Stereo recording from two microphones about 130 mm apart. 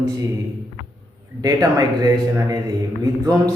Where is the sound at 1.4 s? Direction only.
30° right (ahead or behind).